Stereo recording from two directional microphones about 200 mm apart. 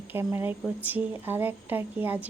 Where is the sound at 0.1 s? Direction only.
10° right (ahead or behind).